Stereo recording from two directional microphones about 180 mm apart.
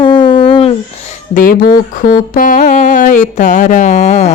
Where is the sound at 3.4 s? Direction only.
45° left (ahead or behind).